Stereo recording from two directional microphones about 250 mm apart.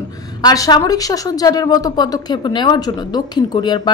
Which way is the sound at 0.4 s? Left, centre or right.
Centre.